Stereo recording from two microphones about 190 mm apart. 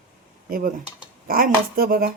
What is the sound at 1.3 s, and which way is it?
Speech, 50° right (ahead or behind).